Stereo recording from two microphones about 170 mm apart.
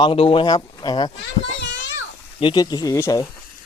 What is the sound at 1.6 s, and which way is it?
Children playing, 90° left.